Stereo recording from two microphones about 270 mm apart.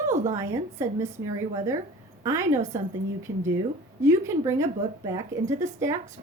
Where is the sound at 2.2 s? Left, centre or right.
Centre.